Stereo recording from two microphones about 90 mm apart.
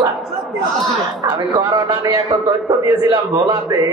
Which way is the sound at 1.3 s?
50° right (ahead or behind).